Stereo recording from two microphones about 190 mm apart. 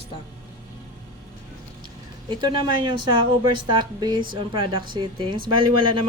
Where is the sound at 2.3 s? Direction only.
25° right (ahead or behind).